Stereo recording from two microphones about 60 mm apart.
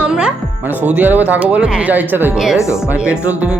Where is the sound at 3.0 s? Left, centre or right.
Right.